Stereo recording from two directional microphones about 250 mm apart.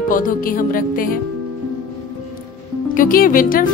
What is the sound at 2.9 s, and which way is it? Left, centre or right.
Speech, left.